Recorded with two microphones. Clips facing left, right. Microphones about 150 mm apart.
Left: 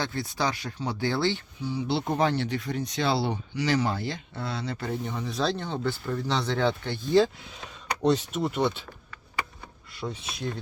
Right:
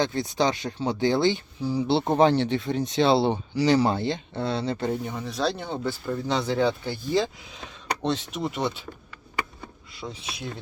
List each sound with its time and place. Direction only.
0.0 s speech: 20° right (ahead or behind)
1.6 s speech: 30° right (ahead or behind)
5.0 s speech: 5° right (ahead or behind)
8.0 s speech: 5° left (ahead or behind)
10.1 s speech: 5° right (ahead or behind)